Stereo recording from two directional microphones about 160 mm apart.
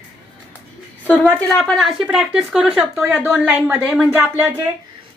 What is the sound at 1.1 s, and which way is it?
Speech, 10° left (ahead or behind).